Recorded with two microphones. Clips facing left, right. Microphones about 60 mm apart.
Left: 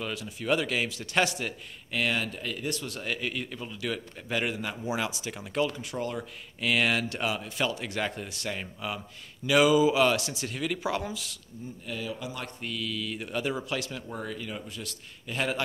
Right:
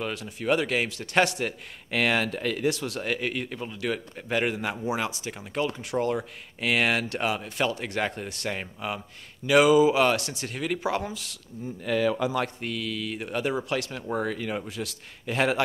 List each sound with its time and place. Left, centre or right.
0.1 s speech: right
1.9 s speech: right
3.0 s speech: right
5.8 s a man's voice: right
6.6 s speech: right
7.2 s speech: right
7.4 s speech: right
10.5 s speech: right
11.8 s speech: right
12.6 s speech: right
14.2 s a man's voice: right